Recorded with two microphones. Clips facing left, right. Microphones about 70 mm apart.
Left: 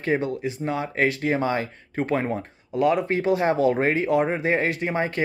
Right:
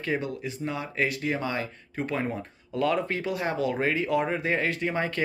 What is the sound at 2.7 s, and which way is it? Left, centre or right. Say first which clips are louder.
Speech: left 5 dB; centre.